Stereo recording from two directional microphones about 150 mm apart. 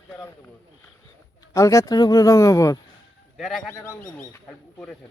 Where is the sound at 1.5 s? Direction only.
20° left (ahead or behind).